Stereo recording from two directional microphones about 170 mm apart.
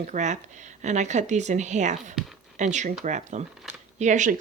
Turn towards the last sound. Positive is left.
turn(degrees=-45)  # may be behind; listen again after turning